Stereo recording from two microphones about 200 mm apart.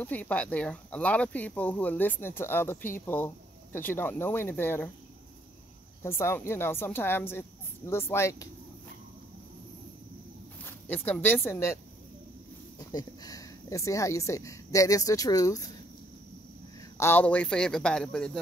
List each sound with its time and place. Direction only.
0.0 s speech: 10° left (ahead or behind)
6.0 s speech: 15° left (ahead or behind)
10.6 s speech: 10° left (ahead or behind)
12.7 s speech: 20° left (ahead or behind)
17.0 s a man's voice: 10° left (ahead or behind)